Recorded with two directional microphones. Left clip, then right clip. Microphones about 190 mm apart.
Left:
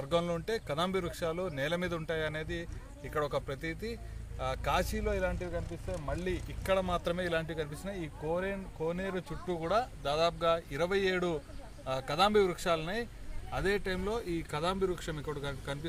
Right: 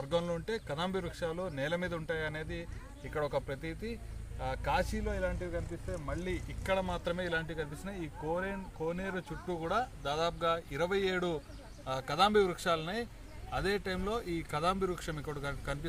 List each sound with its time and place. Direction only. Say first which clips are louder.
0.1 s speech: left 2 dB; 60° left (ahead or behind); by 15.9 s 15° right (ahead or behind)